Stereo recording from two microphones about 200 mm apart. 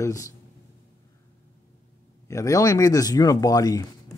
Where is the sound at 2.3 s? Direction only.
15° left (ahead or behind).